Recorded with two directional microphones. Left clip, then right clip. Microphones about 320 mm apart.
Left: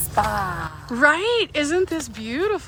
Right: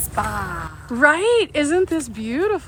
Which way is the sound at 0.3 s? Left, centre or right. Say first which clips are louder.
Left 2 dB; centre.